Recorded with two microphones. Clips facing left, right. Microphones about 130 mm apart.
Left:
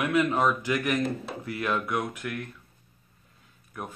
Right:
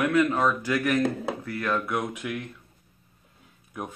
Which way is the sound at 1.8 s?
5° right (ahead or behind).